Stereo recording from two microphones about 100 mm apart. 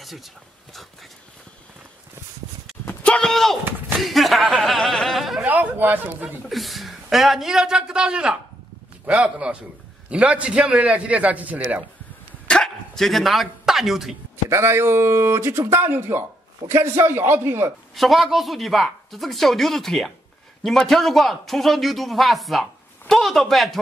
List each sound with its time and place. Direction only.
0.0 s speech: centre (ahead or behind)
3.0 s a sound: 10° left (ahead or behind)
4.0 s a man's voice: centre (ahead or behind)
4.6 s a sound: centre (ahead or behind)
5.4 s speech: 15° right (ahead or behind)
6.2 s a man's voice: centre (ahead or behind)
12.4 s dog: 5° left (ahead or behind)
14.5 s speech: 25° right (ahead or behind)
17.9 s a man's voice: centre (ahead or behind)